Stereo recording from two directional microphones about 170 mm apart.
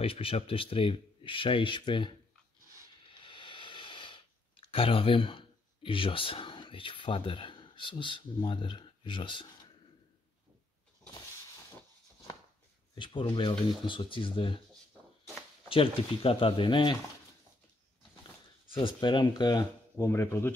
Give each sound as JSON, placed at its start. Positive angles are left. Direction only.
{"t": 0.0, "sound": "speech", "side_deg": 35}
{"t": 3.1, "sound": "a sound", "side_deg": 30}
{"t": 12.9, "sound": "speech", "side_deg": 30}
{"t": 15.7, "sound": "speech", "side_deg": 35}
{"t": 18.7, "sound": "speech", "side_deg": 30}